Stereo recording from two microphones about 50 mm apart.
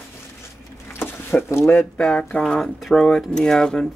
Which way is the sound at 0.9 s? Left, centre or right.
Left.